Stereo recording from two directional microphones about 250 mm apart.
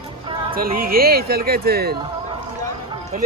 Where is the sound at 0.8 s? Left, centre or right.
Right.